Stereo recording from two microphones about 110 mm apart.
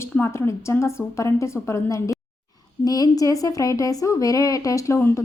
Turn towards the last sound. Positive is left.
turn(degrees=25)  # may be behind; listen again after turning